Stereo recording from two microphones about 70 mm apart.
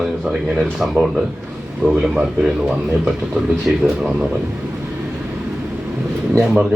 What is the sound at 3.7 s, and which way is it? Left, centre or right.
Speech, centre.